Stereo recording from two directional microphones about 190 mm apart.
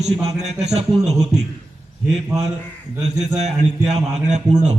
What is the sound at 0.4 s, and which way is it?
Speech, 35° right (ahead or behind).